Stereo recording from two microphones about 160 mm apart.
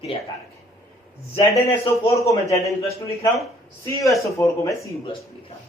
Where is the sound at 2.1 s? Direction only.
20° left (ahead or behind).